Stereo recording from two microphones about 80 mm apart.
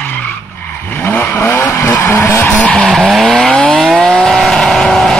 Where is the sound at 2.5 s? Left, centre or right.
Centre.